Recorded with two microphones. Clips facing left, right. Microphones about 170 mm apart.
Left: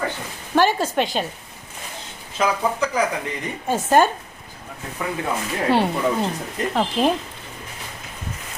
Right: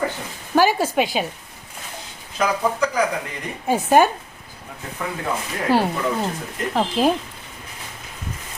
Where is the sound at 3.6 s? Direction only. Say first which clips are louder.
Right 1 dB; 10° right (ahead or behind).